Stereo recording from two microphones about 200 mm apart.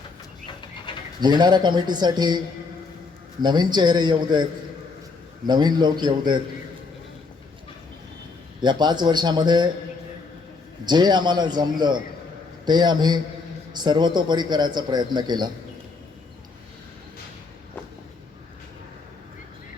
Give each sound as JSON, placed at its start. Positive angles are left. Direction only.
{"t": 0.9, "sound": "bird", "side_deg": 25}
{"t": 1.2, "sound": "a man's voice", "side_deg": -20}
{"t": 3.4, "sound": "a man's voice", "side_deg": -20}
{"t": 5.5, "sound": "a man's voice", "side_deg": -20}
{"t": 8.6, "sound": "a man's voice", "side_deg": -20}
{"t": 10.8, "sound": "a man's voice", "side_deg": -20}